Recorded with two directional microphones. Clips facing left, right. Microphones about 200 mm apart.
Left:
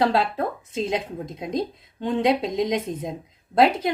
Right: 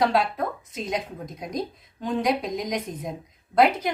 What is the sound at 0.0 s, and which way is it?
Speech, 30° left (ahead or behind).